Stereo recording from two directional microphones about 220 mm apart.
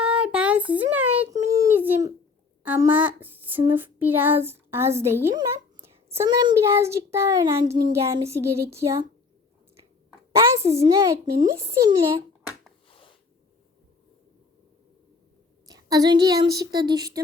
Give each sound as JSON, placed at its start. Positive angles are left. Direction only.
{"t": 0.0, "sound": "a sound", "side_deg": -5}
{"t": 2.6, "sound": "child singing", "side_deg": -5}
{"t": 10.3, "sound": "a child's voice", "side_deg": -10}
{"t": 11.7, "sound": "child singing", "side_deg": -15}
{"t": 15.6, "sound": "speech", "side_deg": -15}